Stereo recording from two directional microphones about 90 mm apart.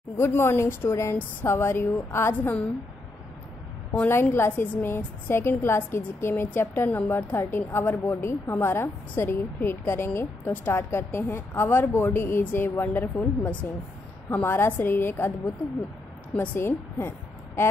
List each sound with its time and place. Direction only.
0.2 s a woman's voice: 25° left (ahead or behind)
4.1 s a woman's voice: 25° left (ahead or behind)